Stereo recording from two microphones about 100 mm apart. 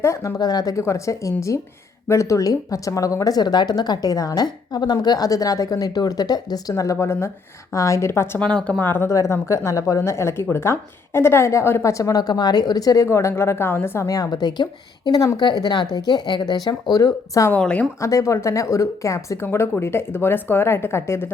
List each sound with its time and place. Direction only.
0.0 s speech: 30° left (ahead or behind)
8.4 s speech: 10° left (ahead or behind)
8.8 s speech: 25° left (ahead or behind)
14.1 s speech: 40° left (ahead or behind)
17.5 s speech: 15° left (ahead or behind)
18.0 s speech: 30° left (ahead or behind)